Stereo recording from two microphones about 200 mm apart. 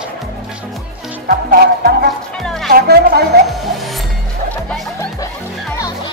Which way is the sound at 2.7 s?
50° right (ahead or behind).